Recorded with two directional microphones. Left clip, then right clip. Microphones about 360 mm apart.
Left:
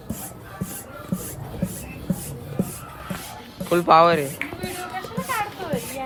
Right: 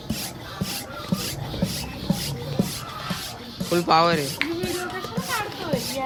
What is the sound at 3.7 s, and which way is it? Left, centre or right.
Speech, centre.